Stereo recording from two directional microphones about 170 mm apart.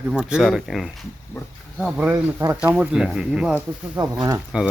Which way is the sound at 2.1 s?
20° right (ahead or behind).